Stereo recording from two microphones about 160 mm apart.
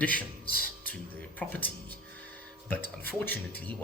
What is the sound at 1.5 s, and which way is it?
Speech, 10° left (ahead or behind).